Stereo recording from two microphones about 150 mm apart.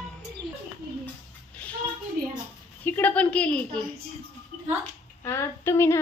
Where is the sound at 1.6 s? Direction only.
5° left (ahead or behind).